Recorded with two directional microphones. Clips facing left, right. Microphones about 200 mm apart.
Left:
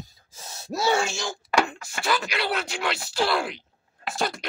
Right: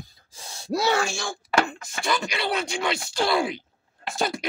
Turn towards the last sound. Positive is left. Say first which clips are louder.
# right 1 dB
turn(degrees=0)  # may be behind; listen again after turning